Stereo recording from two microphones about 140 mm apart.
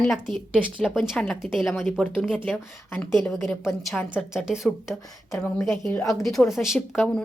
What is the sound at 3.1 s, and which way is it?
Speech, centre (ahead or behind).